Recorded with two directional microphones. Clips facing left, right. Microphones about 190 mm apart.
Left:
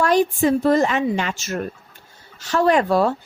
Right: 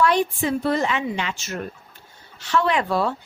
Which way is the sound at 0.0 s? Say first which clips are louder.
Left 3 dB; 40° left (ahead or behind).